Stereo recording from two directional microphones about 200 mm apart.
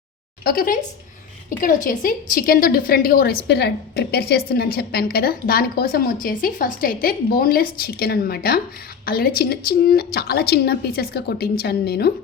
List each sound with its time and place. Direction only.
0.4 s a woman's voice: 45° left (ahead or behind)